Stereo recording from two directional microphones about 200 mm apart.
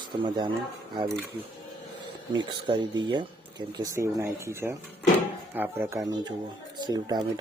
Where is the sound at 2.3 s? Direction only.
20° right (ahead or behind).